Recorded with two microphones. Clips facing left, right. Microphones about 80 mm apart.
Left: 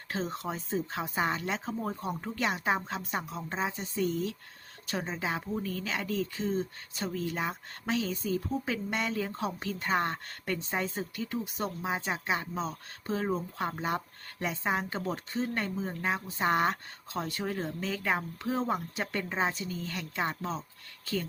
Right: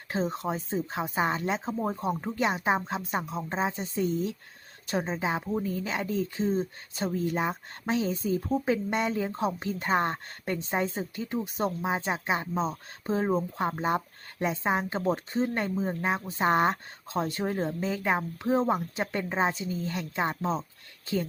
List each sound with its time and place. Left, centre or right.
0.1 s speech: centre